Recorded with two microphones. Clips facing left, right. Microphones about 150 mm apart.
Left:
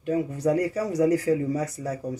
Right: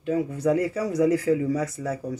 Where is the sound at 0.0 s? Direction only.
40° left (ahead or behind).